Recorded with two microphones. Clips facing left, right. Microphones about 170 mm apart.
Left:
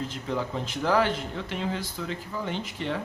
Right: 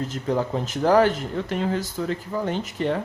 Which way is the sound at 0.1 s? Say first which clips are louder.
Right 6 dB; 45° right (ahead or behind).